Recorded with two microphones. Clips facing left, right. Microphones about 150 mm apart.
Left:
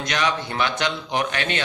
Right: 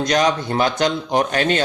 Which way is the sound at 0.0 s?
40° right (ahead or behind).